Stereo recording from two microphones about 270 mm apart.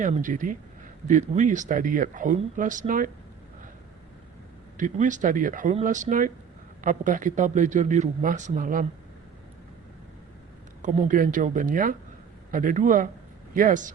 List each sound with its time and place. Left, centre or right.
0.0 s speech: right
4.8 s speech: right
10.8 s speech: right